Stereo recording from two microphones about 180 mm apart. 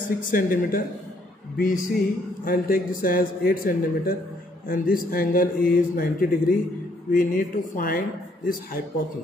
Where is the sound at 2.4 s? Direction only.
50° left (ahead or behind).